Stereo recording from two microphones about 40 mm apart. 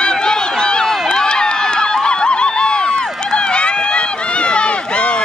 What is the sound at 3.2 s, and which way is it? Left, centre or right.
Run, centre.